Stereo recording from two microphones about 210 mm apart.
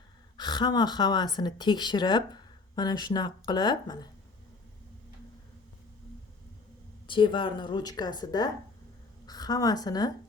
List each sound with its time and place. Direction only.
0.3 s speech: 20° left (ahead or behind)
7.1 s a woman's voice: 25° left (ahead or behind)